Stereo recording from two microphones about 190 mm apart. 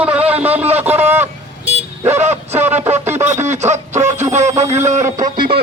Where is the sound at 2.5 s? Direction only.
10° right (ahead or behind).